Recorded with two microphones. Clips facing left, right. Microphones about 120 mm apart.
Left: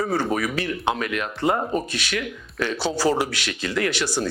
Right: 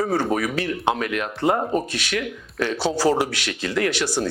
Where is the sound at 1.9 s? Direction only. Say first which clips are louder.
Right 2 dB; 60° right (ahead or behind).